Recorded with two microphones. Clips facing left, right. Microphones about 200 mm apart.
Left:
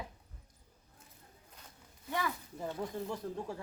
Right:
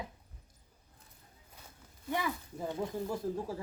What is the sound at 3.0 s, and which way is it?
Speech, 5° right (ahead or behind).